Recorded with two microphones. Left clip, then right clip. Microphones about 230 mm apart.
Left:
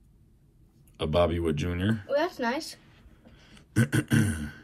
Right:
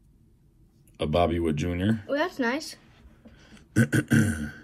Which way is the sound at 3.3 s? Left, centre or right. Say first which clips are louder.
Right 3 dB; centre.